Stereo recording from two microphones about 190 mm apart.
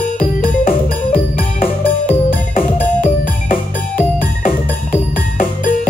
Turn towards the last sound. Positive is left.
turn(degrees=45)  # may be behind; listen again after turning